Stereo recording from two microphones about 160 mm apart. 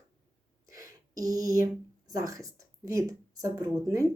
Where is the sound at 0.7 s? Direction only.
20° right (ahead or behind).